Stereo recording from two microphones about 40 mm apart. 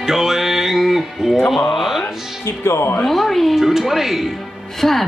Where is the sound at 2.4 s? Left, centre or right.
Left.